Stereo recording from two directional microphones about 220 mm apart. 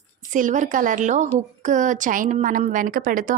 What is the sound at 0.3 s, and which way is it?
A woman's voice, 35° right (ahead or behind).